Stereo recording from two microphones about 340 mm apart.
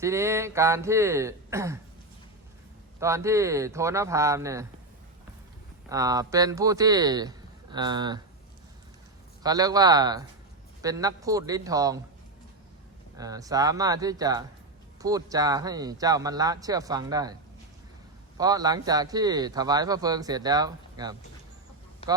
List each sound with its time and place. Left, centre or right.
0.0 s speech: centre
3.0 s speech: centre
5.9 s speech: centre
9.4 s speech: centre
13.1 s speech: centre
18.3 s speech: centre
22.0 s a sound: centre